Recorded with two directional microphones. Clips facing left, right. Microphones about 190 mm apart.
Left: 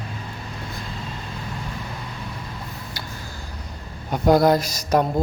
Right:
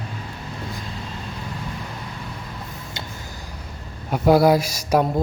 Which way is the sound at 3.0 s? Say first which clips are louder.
Right 3 dB; 25° right (ahead or behind).